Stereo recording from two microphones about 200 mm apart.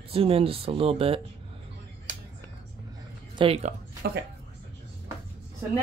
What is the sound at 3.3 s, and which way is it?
Speech, 30° right (ahead or behind).